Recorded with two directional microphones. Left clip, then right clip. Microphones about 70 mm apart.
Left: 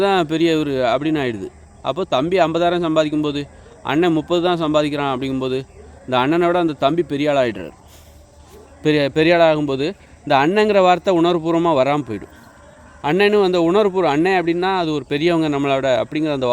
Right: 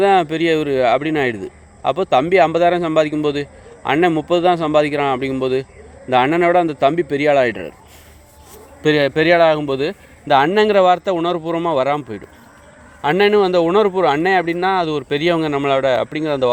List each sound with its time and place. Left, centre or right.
0.0 s speech: left
8.8 s speech: left
9.2 s speech: left
13.0 s speech: left